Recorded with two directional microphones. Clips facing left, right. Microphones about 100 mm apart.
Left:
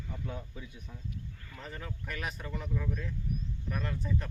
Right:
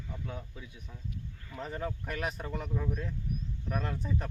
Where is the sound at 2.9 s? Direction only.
10° right (ahead or behind).